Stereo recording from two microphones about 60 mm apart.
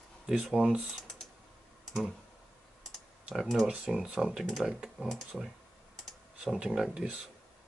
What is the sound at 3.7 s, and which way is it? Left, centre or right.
Speech, centre.